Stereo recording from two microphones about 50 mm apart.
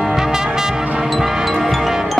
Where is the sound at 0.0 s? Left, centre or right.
Centre.